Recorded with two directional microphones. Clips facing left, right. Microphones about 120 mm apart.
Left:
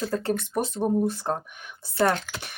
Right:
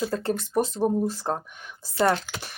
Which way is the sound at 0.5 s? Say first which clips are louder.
Right 2 dB; 10° left (ahead or behind).